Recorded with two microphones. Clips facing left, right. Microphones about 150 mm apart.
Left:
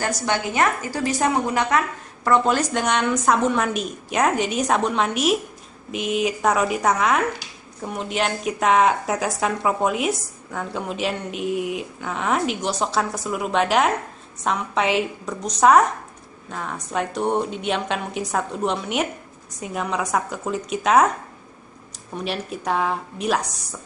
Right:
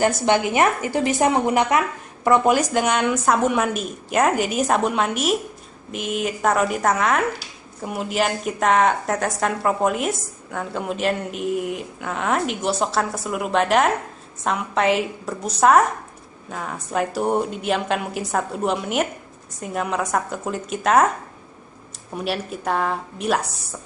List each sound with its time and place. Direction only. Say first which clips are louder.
0.0 s a woman's voice: right 5 dB; 20° right (ahead or behind); by 21.1 s centre (ahead or behind)
22.1 s a woman's voice: right 2 dB; 5° right (ahead or behind)